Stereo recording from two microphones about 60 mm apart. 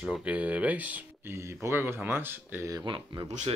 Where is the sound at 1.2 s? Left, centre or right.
Right.